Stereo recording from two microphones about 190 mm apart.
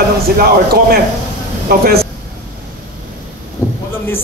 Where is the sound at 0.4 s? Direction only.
55° right (ahead or behind).